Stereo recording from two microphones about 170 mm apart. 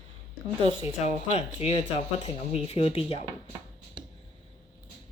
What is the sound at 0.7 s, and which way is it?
Speech, 35° left (ahead or behind).